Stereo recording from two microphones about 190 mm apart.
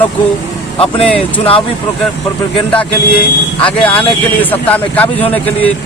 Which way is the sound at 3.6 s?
5° left (ahead or behind).